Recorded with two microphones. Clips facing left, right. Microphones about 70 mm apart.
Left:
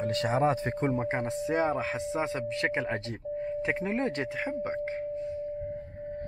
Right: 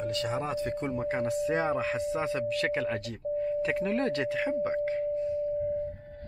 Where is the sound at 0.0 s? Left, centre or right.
Left.